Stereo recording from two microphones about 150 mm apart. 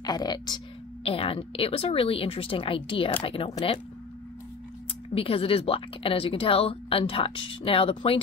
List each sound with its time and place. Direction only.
0.0 s speech: 25° left (ahead or behind)
1.0 s a woman's voice: 40° left (ahead or behind)
5.1 s a woman's voice: 40° left (ahead or behind)